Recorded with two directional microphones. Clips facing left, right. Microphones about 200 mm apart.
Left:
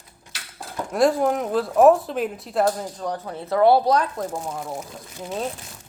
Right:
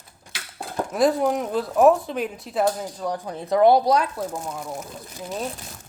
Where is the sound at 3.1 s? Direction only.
15° right (ahead or behind).